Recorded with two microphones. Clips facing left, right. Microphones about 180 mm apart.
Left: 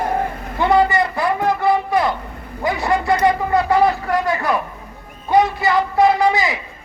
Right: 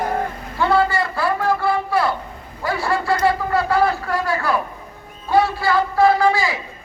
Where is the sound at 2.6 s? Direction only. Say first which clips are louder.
Left 2 dB; 20° left (ahead or behind).